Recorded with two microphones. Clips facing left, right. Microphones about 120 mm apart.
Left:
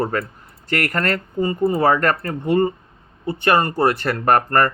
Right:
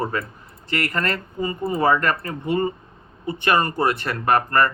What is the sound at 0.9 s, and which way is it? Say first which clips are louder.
Speech: left 3 dB; 55° left (ahead or behind).